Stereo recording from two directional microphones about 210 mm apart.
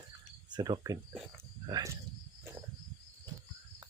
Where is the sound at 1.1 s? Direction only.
5° right (ahead or behind).